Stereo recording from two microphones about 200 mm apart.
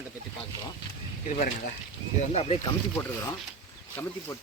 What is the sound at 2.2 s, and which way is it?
Speech, 30° left (ahead or behind).